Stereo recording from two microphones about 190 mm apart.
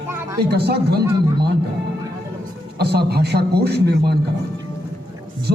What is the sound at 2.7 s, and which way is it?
A man's voice, 60° right (ahead or behind).